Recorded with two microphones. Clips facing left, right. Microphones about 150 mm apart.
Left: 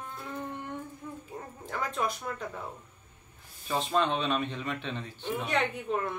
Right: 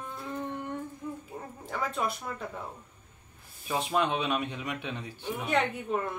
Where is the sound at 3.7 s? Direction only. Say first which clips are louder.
Even; 10° right (ahead or behind).